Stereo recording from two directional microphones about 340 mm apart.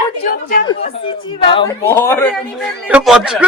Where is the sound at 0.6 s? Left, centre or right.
Centre.